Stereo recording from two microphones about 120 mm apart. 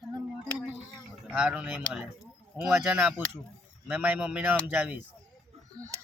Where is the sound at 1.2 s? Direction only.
10° right (ahead or behind).